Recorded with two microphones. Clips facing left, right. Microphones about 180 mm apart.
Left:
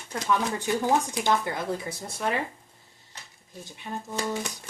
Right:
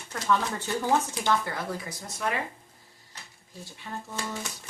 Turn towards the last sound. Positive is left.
turn(degrees=15)  # may be behind; listen again after turning